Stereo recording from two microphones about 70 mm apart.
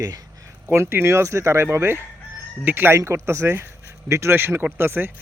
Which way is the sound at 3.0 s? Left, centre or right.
Right.